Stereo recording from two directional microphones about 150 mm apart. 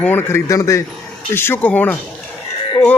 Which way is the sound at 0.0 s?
15° left (ahead or behind).